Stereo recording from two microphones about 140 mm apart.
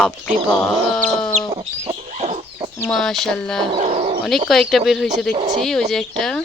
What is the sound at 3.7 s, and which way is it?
Dog, 50° right (ahead or behind).